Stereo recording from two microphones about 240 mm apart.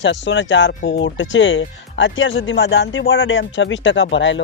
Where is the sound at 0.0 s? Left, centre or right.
Left.